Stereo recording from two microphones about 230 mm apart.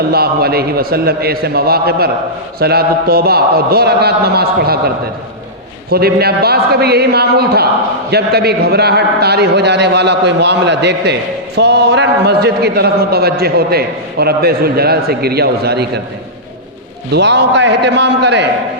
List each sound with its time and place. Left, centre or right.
0.1 s a man's voice: right
5.9 s a man's voice: right
17.1 s a man's voice: right